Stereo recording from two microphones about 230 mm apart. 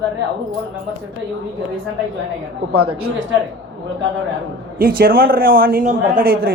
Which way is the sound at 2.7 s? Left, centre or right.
Right.